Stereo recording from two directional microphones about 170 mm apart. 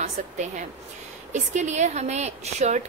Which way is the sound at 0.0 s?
45° right (ahead or behind).